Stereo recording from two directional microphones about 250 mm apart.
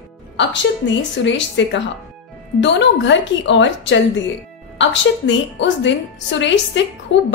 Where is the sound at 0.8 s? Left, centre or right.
Left.